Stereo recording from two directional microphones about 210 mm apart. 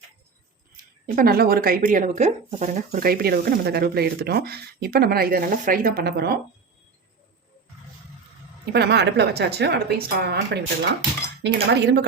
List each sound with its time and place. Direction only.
1.0 s speech: 40° right (ahead or behind)
8.7 s speech: 50° right (ahead or behind)